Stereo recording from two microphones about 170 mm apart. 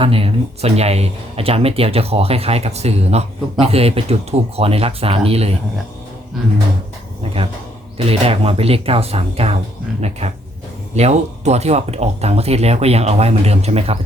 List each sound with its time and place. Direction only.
0.0 s speech: 35° right (ahead or behind)
7.9 s speech: 35° right (ahead or behind)